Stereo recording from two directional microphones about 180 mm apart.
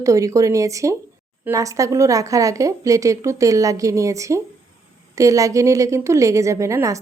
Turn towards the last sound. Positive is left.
turn(degrees=-15)  # may be behind; listen again after turning